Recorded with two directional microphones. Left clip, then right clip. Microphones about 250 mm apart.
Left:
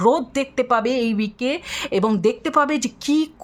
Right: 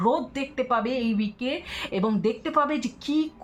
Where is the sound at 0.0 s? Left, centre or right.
Left.